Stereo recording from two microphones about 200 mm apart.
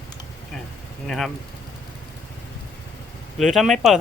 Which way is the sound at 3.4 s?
Centre (ahead or behind).